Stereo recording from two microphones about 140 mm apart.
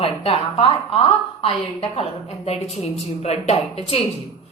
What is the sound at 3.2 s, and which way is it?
Speech, 50° left (ahead or behind).